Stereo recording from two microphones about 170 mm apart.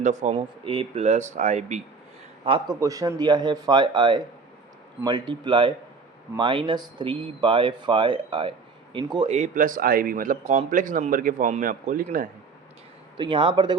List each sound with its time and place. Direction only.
0.0 s speech: 45° right (ahead or behind)
0.3 s speech: 30° right (ahead or behind)
2.4 s a man's voice: 35° right (ahead or behind)
2.8 s speech: 20° right (ahead or behind)
9.3 s speech: 50° right (ahead or behind)
13.1 s speech: 30° right (ahead or behind)